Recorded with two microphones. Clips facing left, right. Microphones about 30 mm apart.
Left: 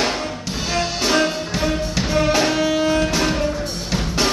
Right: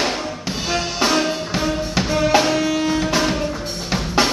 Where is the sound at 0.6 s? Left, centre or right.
Centre.